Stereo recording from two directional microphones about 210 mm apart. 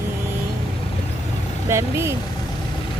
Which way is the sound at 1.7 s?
10° right (ahead or behind).